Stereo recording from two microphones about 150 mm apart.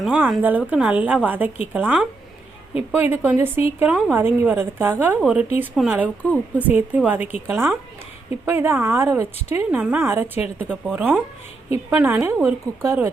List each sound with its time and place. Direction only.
0.0 s speech: 5° right (ahead or behind)